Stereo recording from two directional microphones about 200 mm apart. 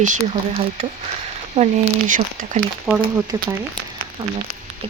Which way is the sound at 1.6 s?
35° right (ahead or behind).